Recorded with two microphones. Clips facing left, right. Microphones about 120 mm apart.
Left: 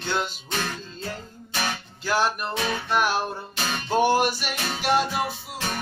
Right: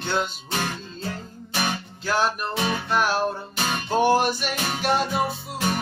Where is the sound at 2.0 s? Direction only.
Centre (ahead or behind).